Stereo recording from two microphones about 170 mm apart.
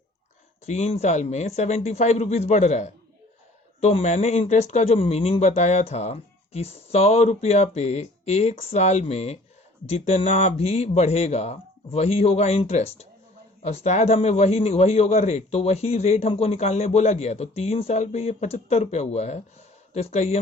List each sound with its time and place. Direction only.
0.6 s a man's voice: 40° left (ahead or behind)